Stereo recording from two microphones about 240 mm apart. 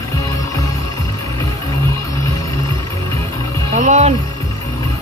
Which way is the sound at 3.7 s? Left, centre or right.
Right.